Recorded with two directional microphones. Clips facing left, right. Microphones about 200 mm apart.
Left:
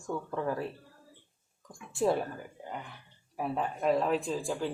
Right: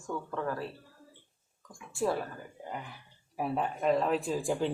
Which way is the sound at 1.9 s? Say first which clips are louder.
Left 3 dB; 20° left (ahead or behind).